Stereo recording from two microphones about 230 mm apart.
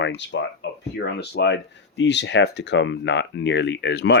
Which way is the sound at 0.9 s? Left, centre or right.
Left.